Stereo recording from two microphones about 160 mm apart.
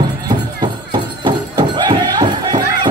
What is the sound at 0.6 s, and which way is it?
Music, 30° right (ahead or behind).